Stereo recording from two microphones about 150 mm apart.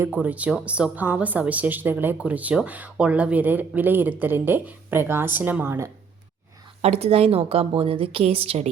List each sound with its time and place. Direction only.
0.0 s a woman's voice: 10° right (ahead or behind)
6.8 s a woman's voice: 45° right (ahead or behind)